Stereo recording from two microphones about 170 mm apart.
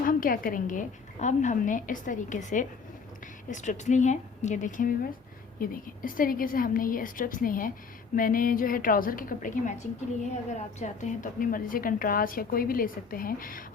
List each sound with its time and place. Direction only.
0.0 s a woman's voice: 55° left (ahead or behind)